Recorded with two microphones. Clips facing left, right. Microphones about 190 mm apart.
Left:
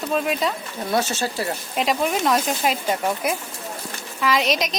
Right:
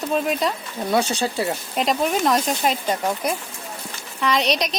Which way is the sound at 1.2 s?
20° right (ahead or behind).